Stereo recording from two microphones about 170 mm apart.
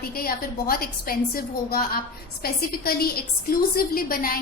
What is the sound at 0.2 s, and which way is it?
A woman's voice, 60° left (ahead or behind).